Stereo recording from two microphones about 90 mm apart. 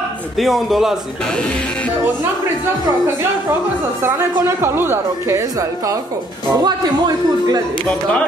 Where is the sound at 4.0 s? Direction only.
30° right (ahead or behind).